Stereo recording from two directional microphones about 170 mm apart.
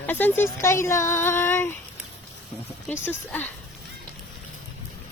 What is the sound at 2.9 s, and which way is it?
Speech, 10° left (ahead or behind).